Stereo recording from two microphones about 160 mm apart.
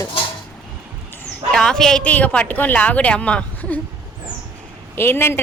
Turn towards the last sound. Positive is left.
turn(degrees=15)  # may be behind; listen again after turning